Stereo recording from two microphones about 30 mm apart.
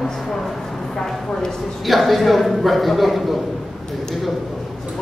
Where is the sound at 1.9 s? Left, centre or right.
Centre.